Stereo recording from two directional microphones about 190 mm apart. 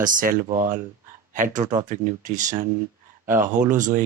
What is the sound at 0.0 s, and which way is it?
Speech, 45° right (ahead or behind).